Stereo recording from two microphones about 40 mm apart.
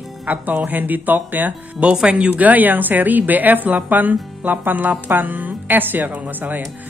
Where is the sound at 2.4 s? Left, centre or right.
Right.